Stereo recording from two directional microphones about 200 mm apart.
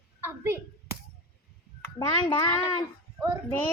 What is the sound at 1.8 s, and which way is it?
Speech, 15° left (ahead or behind).